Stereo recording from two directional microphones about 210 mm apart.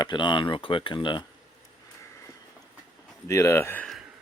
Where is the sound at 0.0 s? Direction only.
20° left (ahead or behind).